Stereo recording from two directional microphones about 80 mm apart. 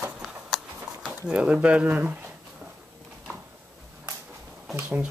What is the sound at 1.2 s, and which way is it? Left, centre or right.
Speech, centre.